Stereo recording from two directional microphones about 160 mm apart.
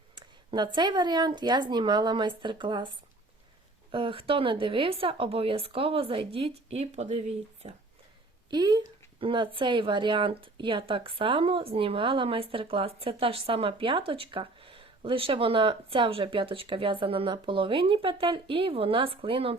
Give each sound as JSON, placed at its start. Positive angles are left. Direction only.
{"t": 0.5, "sound": "speech", "side_deg": -30}
{"t": 3.9, "sound": "speech", "side_deg": -35}
{"t": 8.4, "sound": "speech", "side_deg": -25}